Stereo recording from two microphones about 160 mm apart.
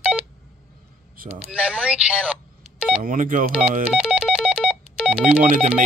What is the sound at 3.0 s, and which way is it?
Speech, 55° right (ahead or behind).